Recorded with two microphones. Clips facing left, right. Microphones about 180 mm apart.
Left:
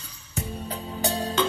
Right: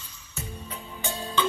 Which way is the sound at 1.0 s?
75° left (ahead or behind).